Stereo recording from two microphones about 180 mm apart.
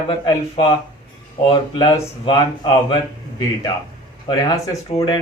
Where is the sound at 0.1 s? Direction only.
25° left (ahead or behind).